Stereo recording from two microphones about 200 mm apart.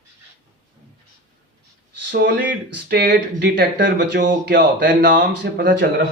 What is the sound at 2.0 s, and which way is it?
Speech, 55° right (ahead or behind).